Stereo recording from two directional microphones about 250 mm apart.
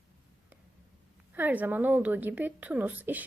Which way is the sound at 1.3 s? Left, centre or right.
Centre.